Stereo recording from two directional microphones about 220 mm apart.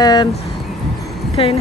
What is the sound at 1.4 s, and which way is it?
Speech, 25° left (ahead or behind).